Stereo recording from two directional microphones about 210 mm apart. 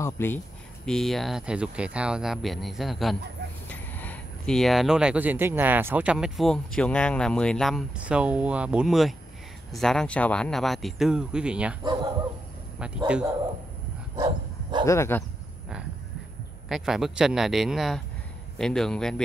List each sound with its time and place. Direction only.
0.0 s speech: 10° left (ahead or behind); by 11.7 s 5° right (ahead or behind)
12.7 s speech: 5° right (ahead or behind)
14.1 s dog: 20° right (ahead or behind)
14.9 s speech: 10° left (ahead or behind)
16.6 s speech: centre (ahead or behind)